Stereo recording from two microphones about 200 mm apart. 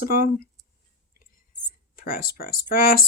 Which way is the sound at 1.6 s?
45° left (ahead or behind).